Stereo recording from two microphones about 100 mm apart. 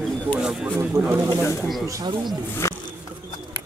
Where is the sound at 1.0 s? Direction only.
35° right (ahead or behind).